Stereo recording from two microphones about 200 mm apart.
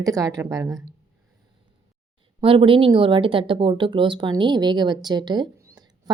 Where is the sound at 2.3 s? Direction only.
25° right (ahead or behind).